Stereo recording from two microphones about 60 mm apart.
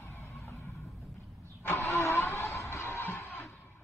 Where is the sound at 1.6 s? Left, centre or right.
Left.